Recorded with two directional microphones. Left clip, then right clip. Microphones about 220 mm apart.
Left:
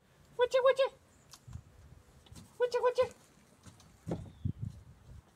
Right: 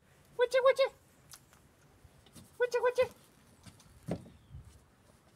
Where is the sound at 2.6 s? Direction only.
15° right (ahead or behind).